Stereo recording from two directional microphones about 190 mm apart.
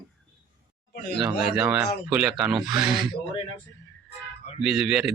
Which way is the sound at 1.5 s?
5° right (ahead or behind).